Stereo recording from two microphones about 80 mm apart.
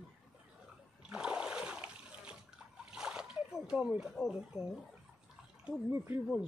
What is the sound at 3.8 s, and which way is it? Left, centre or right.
Speech, centre.